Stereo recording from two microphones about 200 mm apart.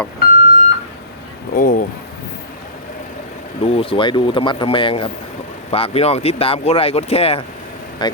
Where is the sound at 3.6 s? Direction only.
25° left (ahead or behind).